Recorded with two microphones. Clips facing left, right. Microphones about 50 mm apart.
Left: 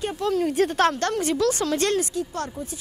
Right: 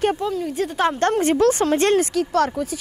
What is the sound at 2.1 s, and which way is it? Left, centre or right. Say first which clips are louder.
Speech: right 9 dB; right.